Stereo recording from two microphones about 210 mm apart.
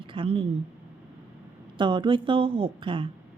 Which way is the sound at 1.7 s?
25° right (ahead or behind).